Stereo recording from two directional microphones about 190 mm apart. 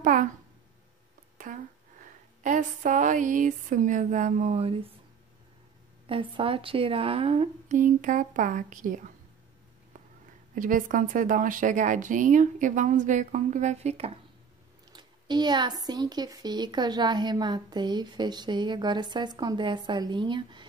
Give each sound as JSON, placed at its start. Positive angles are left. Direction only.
{"t": 0.0, "sound": "a child's voice", "side_deg": -45}
{"t": 1.4, "sound": "a sound", "side_deg": -45}
{"t": 2.4, "sound": "a woman's voice", "side_deg": -40}
{"t": 6.0, "sound": "a woman's voice", "side_deg": -30}
{"t": 10.5, "sound": "a woman's voice", "side_deg": -45}
{"t": 14.9, "sound": "a woman's voice", "side_deg": -25}